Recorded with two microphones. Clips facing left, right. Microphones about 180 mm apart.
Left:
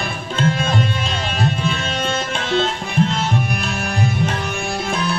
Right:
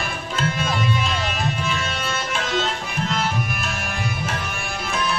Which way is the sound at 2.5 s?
30° left (ahead or behind).